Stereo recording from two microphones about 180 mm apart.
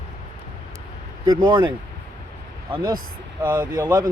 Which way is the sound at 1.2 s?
25° right (ahead or behind).